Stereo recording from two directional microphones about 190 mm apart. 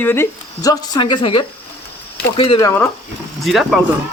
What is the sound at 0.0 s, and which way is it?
Speech, 10° left (ahead or behind).